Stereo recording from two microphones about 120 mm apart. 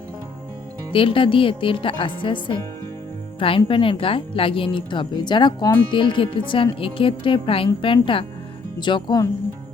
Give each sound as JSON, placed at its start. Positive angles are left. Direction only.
{"t": 0.9, "sound": "a woman's voice", "side_deg": 45}